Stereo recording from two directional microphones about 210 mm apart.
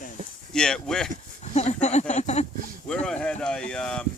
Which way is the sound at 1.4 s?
30° left (ahead or behind).